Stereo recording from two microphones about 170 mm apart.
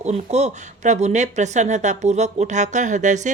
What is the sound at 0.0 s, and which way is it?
A woman's voice, 40° right (ahead or behind).